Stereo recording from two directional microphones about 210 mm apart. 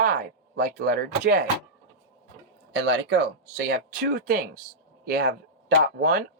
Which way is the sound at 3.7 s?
45° right (ahead or behind).